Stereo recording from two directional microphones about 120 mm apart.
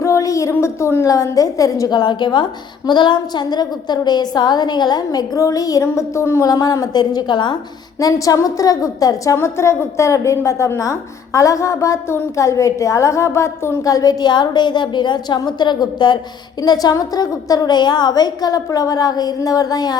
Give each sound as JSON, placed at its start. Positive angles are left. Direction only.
{"t": 0.0, "sound": "a woman's voice", "side_deg": 25}